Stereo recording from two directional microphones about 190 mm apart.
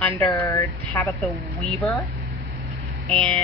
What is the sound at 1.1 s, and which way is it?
Speech, centre (ahead or behind).